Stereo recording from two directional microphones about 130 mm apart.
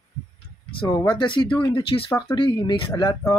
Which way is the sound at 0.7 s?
35° left (ahead or behind).